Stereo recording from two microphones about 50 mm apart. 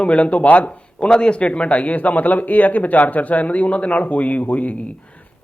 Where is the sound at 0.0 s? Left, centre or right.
Left.